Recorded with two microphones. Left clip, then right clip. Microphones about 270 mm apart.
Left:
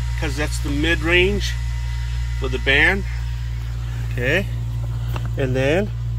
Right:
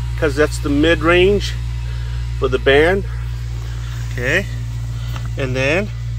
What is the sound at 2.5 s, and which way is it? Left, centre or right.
Speech, centre.